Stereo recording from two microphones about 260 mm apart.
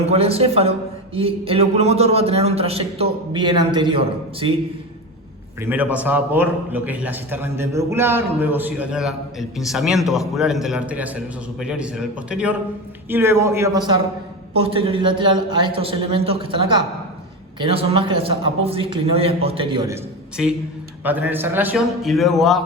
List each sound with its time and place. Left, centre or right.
0.0 s a man's voice: right
5.5 s a man's voice: centre
21.0 s a man's voice: centre